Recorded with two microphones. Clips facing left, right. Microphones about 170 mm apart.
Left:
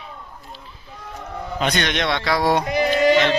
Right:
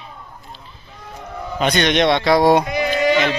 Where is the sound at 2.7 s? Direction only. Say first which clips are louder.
Left 1 dB; 35° left (ahead or behind).